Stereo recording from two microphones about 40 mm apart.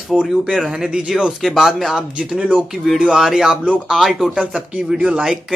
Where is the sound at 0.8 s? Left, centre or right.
Centre.